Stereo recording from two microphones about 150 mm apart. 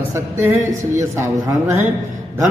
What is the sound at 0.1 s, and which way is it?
A man's voice, 20° right (ahead or behind).